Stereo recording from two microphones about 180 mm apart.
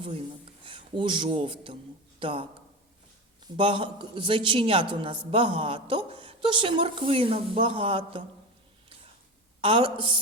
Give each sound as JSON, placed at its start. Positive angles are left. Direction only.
{"t": 0.6, "sound": "a man's voice", "side_deg": -30}
{"t": 9.6, "sound": "a man's voice", "side_deg": -30}